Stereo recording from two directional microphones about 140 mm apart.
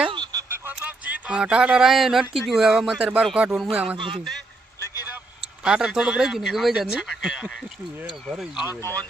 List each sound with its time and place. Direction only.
0.1 s a sound: 30° right (ahead or behind)
0.4 s a sound: 15° right (ahead or behind); by 2.2 s centre (ahead or behind)
2.5 s speech: 5° right (ahead or behind)
3.9 s a man's voice: 35° right (ahead or behind)
5.6 s speech: 5° right (ahead or behind)
8.8 s speech: 15° left (ahead or behind)